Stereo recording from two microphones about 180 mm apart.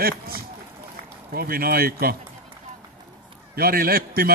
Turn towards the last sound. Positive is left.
turn(degrees=-55)  # may be behind; listen again after turning